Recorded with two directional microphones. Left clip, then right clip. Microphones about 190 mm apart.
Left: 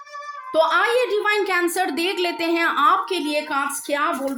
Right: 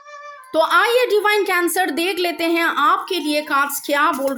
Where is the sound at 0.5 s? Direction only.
25° right (ahead or behind).